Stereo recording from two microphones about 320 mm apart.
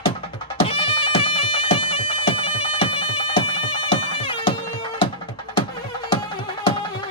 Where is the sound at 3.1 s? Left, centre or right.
Centre.